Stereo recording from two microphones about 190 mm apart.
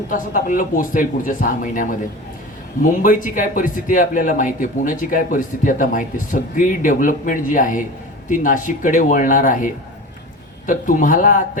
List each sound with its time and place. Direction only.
0.1 s speech: 45° left (ahead or behind)
10.7 s speech: 45° left (ahead or behind)